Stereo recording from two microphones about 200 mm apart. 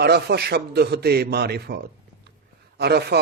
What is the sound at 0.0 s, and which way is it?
Speech, 55° right (ahead or behind).